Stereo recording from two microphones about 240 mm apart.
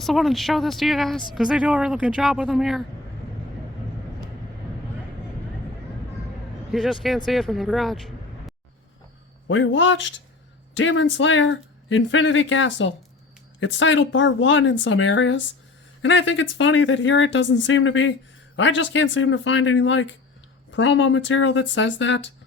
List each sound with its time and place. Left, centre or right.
0.0 s speech: centre
6.7 s speech: centre
9.5 s speech: left